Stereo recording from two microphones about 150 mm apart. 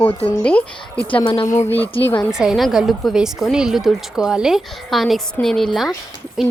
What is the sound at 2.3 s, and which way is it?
A woman's voice, 5° right (ahead or behind).